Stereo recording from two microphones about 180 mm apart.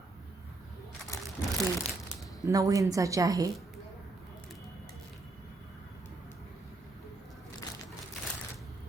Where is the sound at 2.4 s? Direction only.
20° right (ahead or behind).